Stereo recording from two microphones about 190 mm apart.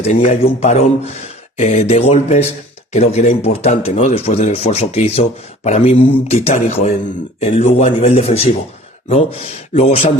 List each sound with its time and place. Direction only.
0.1 s speech: 40° left (ahead or behind)